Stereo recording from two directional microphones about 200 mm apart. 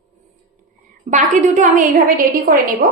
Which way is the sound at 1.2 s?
40° right (ahead or behind).